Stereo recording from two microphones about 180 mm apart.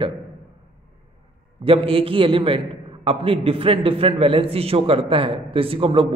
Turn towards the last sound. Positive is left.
turn(degrees=-30)  # may be behind; listen again after turning